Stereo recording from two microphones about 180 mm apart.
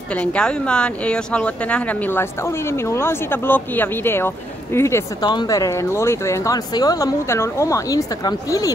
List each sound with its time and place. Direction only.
0.1 s speech: 5° left (ahead or behind)